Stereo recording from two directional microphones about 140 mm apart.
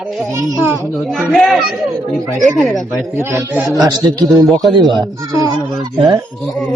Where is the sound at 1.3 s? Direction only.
Centre (ahead or behind).